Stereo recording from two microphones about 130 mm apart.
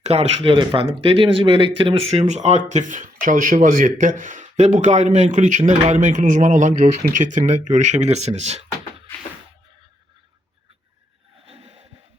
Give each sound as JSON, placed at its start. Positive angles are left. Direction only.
{"t": 0.0, "sound": "speech", "side_deg": -55}
{"t": 0.5, "sound": "speech", "side_deg": -40}
{"t": 11.4, "sound": "a sound", "side_deg": -50}